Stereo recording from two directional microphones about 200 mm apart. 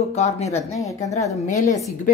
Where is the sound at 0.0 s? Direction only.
35° left (ahead or behind).